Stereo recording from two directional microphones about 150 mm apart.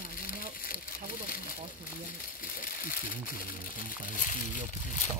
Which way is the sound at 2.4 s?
70° left (ahead or behind).